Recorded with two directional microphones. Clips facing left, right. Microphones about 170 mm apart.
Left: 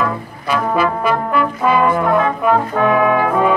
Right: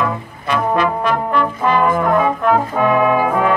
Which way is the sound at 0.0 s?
5° left (ahead or behind).